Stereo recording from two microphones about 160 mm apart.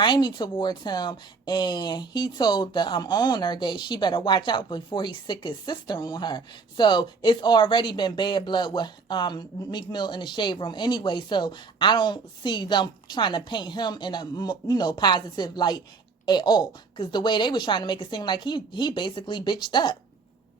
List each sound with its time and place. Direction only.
0.0 s speech: 30° left (ahead or behind)